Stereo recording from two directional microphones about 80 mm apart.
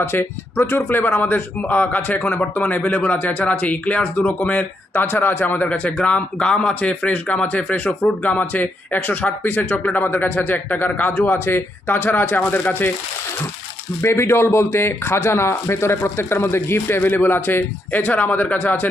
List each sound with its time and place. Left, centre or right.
0.0 s a man's voice: left
14.0 s a man's voice: left